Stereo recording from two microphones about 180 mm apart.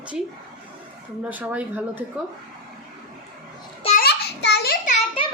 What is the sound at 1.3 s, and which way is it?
Speech, 10° right (ahead or behind).